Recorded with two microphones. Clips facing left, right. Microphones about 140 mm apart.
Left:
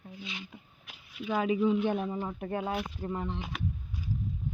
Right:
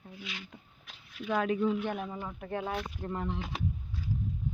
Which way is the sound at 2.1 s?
15° left (ahead or behind).